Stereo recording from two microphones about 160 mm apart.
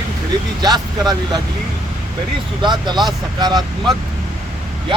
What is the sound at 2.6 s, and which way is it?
Speech, 30° right (ahead or behind).